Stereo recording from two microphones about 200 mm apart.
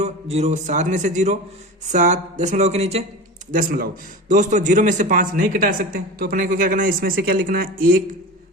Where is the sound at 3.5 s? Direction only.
45° right (ahead or behind).